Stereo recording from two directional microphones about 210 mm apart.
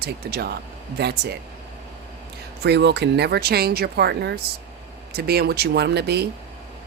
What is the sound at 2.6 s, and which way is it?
Speech, 55° right (ahead or behind).